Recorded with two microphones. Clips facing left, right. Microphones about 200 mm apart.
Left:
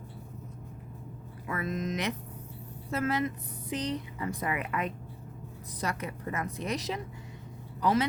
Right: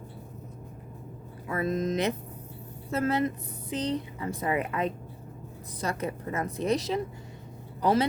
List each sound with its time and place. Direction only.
1.5 s a woman's voice: 30° right (ahead or behind)